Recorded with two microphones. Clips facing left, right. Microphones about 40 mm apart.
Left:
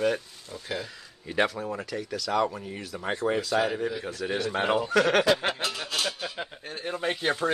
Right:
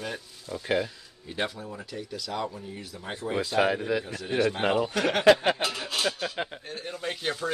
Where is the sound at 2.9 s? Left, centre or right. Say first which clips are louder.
Left 5 dB; left.